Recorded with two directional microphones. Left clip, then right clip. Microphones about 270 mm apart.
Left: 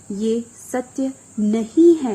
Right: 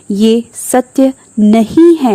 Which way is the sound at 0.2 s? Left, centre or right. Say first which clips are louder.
Right 11 dB; right.